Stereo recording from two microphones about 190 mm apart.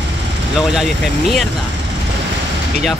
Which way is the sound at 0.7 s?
Centre (ahead or behind).